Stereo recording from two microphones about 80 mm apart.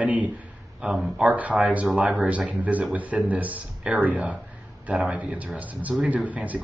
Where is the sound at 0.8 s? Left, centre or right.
Centre.